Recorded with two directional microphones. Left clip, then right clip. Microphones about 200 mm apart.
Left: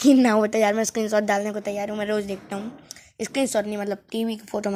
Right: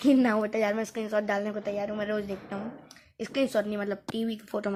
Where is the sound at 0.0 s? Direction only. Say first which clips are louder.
Left 6 dB; 30° left (ahead or behind).